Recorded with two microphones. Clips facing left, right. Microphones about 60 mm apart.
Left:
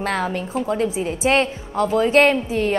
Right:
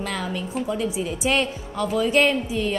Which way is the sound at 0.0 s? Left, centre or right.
Left.